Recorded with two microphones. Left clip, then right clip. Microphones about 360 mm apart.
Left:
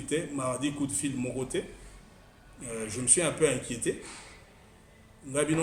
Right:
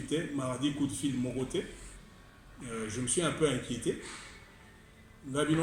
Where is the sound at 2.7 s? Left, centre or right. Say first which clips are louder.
Left 4 dB; left.